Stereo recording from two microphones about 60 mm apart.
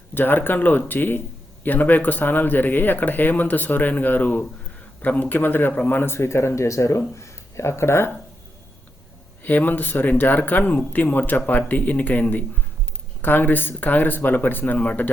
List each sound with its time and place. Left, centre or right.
0.1 s speech: left
9.4 s speech: left